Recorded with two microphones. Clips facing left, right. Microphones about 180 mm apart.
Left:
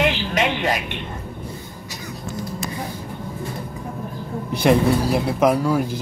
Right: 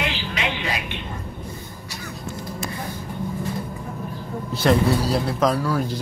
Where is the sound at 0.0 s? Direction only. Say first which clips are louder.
Left 6 dB; 45° left (ahead or behind).